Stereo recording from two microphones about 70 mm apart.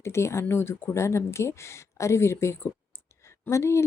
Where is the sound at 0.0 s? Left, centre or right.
Left.